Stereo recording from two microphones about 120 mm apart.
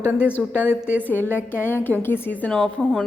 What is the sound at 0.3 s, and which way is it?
Speech, 15° left (ahead or behind).